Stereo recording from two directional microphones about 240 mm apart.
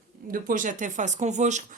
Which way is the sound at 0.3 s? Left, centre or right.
Right.